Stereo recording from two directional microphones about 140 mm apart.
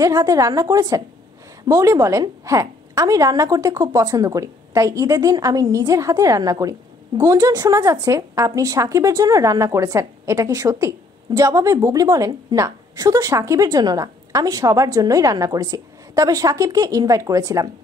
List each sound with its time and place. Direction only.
0.0 s a woman's voice: 25° right (ahead or behind)